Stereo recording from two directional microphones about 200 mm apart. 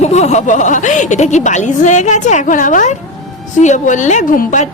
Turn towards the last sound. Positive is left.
turn(degrees=40)  # may be behind; listen again after turning